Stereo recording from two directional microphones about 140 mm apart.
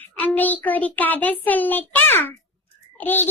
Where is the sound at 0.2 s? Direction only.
10° left (ahead or behind).